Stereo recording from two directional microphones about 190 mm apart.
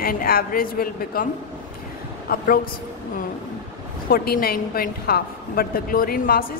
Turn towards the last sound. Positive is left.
turn(degrees=50)  # may be behind; listen again after turning